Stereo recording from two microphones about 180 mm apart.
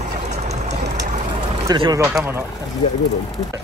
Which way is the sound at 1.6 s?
25° right (ahead or behind).